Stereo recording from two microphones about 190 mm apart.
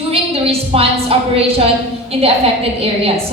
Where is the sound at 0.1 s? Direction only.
30° right (ahead or behind).